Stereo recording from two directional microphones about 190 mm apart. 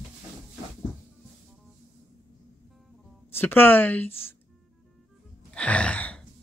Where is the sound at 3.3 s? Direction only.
10° left (ahead or behind).